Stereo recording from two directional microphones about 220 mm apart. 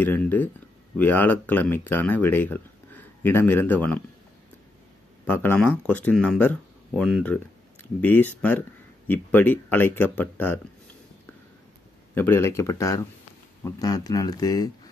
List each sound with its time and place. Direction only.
0.0 s speech: 10° left (ahead or behind)
5.2 s speech: 10° left (ahead or behind)
12.2 s speech: 10° left (ahead or behind)